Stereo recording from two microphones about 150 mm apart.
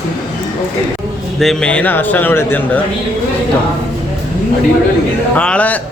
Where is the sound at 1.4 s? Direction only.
5° left (ahead or behind).